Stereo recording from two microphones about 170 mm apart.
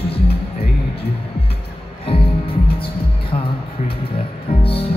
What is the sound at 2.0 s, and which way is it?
Music, 35° left (ahead or behind).